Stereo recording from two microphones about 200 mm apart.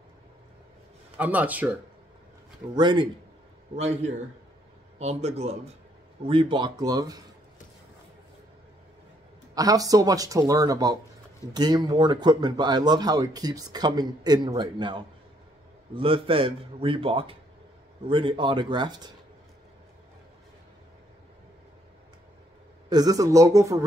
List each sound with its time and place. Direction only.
1.1 s speech: 5° right (ahead or behind)
2.7 s speech: 20° right (ahead or behind)
3.7 s a man's voice: 35° right (ahead or behind); by 7.2 s 20° right (ahead or behind)
9.6 s speech: 20° right (ahead or behind)
22.8 s speech: 20° right (ahead or behind)